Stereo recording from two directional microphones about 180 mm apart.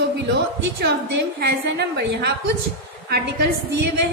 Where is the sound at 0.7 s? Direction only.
65° right (ahead or behind).